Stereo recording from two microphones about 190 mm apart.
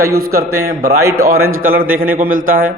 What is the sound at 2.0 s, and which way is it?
Speech, 50° right (ahead or behind).